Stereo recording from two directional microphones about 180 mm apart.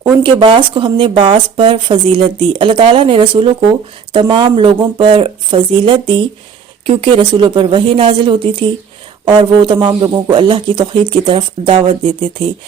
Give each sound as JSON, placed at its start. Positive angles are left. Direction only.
{"t": 0.2, "sound": "speech", "side_deg": -30}